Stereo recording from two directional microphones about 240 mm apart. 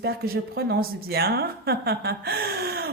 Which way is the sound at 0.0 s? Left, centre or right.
Right.